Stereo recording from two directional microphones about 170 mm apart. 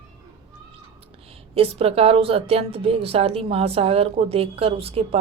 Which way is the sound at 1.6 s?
35° right (ahead or behind).